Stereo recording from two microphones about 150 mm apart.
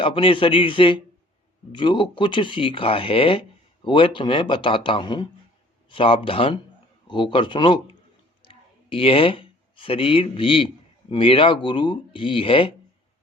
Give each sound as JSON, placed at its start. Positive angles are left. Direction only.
{"t": 0.0, "sound": "speech", "side_deg": 35}